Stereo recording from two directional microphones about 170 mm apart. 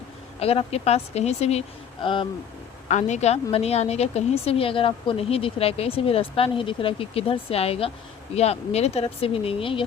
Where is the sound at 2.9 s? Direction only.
45° left (ahead or behind).